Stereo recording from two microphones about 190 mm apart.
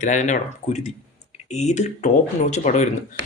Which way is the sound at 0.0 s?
40° left (ahead or behind).